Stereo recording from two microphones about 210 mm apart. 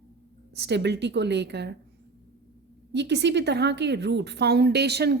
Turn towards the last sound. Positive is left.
turn(degrees=-50)  # may be behind; listen again after turning